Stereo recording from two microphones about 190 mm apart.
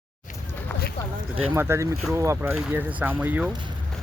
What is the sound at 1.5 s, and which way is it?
Speech, 15° right (ahead or behind).